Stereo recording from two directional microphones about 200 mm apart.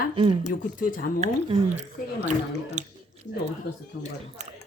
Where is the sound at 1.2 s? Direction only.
30° right (ahead or behind).